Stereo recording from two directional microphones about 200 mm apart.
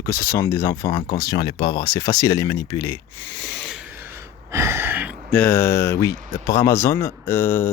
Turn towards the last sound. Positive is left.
turn(degrees=10)  # may be behind; listen again after turning